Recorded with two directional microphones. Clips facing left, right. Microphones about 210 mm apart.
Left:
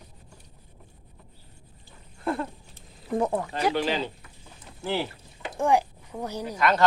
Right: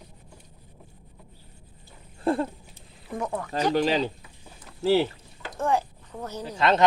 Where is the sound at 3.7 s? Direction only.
40° right (ahead or behind).